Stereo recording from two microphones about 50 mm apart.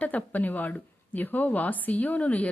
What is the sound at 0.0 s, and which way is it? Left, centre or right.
A woman's voice, left.